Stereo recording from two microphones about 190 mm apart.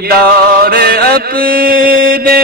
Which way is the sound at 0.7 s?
55° right (ahead or behind).